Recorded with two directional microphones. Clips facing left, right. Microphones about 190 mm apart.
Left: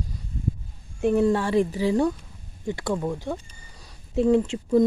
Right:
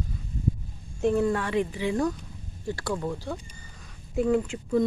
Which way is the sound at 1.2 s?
30° left (ahead or behind).